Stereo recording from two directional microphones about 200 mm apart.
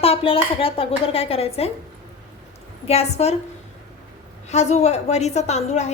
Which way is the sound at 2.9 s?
30° left (ahead or behind).